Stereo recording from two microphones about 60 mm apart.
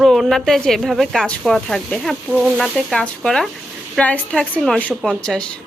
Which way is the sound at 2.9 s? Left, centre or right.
Centre.